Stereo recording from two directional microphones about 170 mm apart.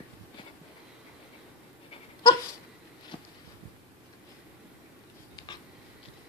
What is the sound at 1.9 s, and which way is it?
Dog, 30° left (ahead or behind).